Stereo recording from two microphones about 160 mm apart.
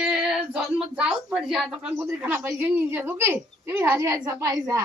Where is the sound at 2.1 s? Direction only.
10° right (ahead or behind).